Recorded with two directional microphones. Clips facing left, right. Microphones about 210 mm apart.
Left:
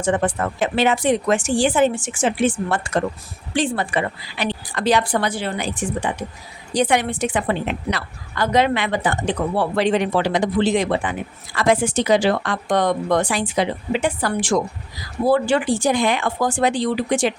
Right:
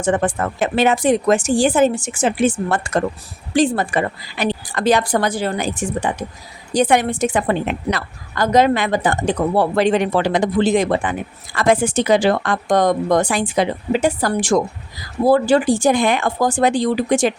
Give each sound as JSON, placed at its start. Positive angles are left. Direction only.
{"t": 0.0, "sound": "a woman's voice", "side_deg": -45}